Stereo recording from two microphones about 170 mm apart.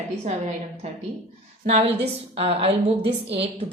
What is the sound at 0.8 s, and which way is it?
A woman's voice, 40° right (ahead or behind).